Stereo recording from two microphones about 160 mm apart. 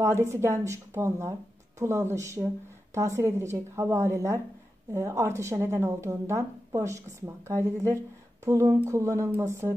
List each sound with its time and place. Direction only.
0.0 s a woman's voice: 20° right (ahead or behind)